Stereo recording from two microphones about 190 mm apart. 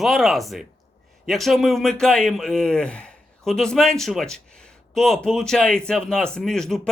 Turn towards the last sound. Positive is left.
turn(degrees=5)  # may be behind; listen again after turning